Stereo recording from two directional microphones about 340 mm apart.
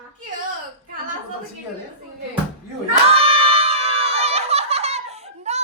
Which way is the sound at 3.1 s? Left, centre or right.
Centre.